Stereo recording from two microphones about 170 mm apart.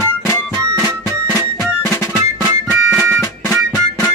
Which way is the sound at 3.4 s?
15° left (ahead or behind).